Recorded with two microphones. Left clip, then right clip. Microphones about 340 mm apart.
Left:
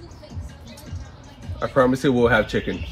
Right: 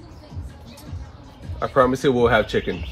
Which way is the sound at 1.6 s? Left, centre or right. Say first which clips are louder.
Right 1 dB; centre.